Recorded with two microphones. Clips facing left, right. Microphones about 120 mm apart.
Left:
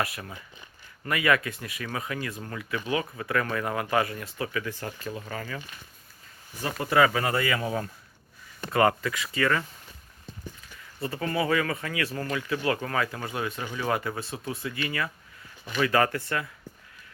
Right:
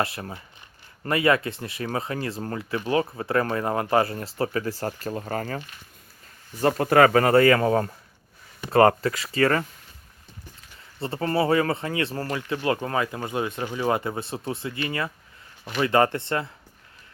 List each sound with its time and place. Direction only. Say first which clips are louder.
0.0 s speech: right 4 dB; 30° right (ahead or behind)
6.6 s speech: right 6 dB; 55° right (ahead or behind)
8.7 s speech: right 6 dB; 35° right (ahead or behind)
11.0 s speech: right 4 dB; 35° right (ahead or behind)